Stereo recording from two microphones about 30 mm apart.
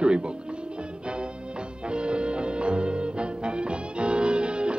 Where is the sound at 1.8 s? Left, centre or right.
Right.